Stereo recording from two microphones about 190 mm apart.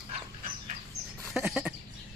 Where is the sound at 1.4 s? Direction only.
5° right (ahead or behind).